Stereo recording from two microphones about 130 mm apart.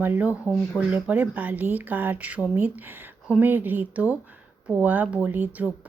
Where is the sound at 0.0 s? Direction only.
10° right (ahead or behind).